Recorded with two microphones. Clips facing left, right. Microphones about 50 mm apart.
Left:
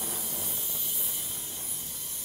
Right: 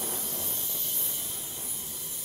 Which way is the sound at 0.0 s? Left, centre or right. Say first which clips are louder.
Right 1 dB; centre.